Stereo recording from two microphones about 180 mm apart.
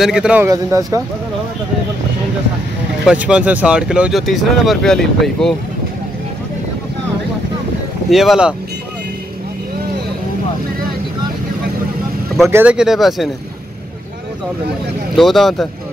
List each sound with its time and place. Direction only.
0.0 s speech: 5° right (ahead or behind)
0.5 s speech: 20° right (ahead or behind)
3.1 s speech: 5° right (ahead or behind)
8.1 s speech: centre (ahead or behind)
12.4 s speech: 10° right (ahead or behind)
15.1 s speech: centre (ahead or behind)